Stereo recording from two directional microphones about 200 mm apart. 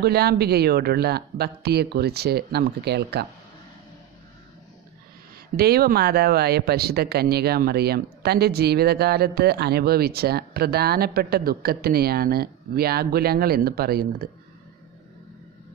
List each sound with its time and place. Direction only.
0.0 s speech: 50° right (ahead or behind)
5.6 s speech: 50° right (ahead or behind)